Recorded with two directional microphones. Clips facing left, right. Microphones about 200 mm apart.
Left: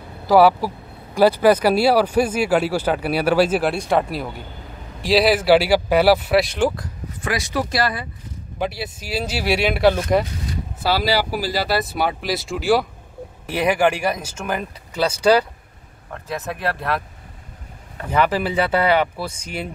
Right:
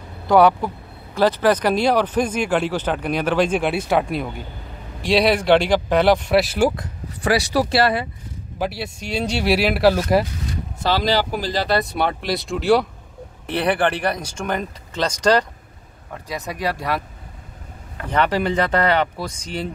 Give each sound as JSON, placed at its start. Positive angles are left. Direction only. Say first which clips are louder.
{"t": 0.3, "sound": "speech", "louder": "left 1 dB", "side_deg": 5}
{"t": 7.2, "sound": "speech", "louder": "right 5 dB", "side_deg": -35}
{"t": 8.5, "sound": "speech", "louder": "even", "side_deg": 0}
{"t": 10.8, "sound": "speech", "louder": "even", "side_deg": 10}
{"t": 16.1, "sound": "speech", "louder": "left 1 dB", "side_deg": -5}
{"t": 18.1, "sound": "speech", "louder": "even", "side_deg": 5}